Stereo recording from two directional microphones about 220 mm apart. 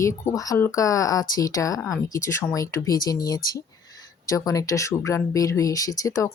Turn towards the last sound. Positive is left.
turn(degrees=15)  # may be behind; listen again after turning